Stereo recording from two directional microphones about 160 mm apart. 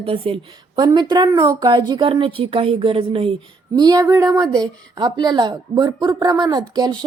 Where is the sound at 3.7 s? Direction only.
25° right (ahead or behind).